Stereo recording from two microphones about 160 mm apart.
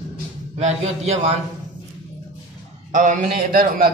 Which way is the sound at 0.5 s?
45° right (ahead or behind).